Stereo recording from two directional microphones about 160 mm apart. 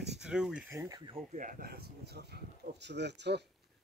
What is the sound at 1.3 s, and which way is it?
Speech, 55° right (ahead or behind).